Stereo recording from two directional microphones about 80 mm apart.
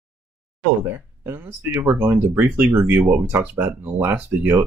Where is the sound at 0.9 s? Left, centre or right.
Right.